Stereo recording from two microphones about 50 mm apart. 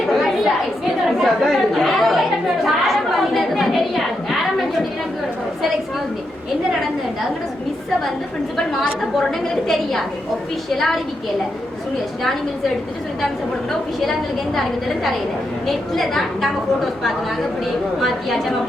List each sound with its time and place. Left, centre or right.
0.1 s chatter: centre
8.5 s a woman's voice: centre
10.8 s a woman's voice: centre
14.0 s a woman's voice: centre
18.0 s a woman's voice: centre